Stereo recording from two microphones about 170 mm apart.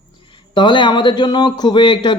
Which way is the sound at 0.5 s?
25° left (ahead or behind).